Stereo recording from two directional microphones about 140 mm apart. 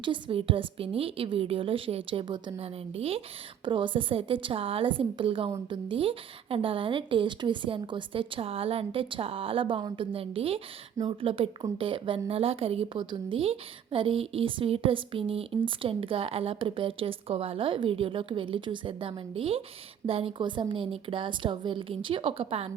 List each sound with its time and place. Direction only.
0.0 s a woman's voice: 40° right (ahead or behind)